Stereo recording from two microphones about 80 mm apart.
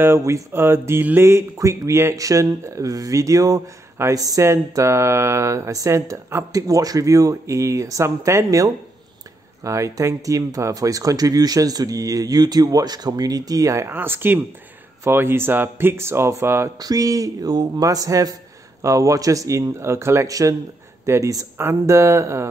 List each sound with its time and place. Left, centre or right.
0.0 s speech: right
13.9 s speech: right
16.7 s speech: right
21.5 s speech: right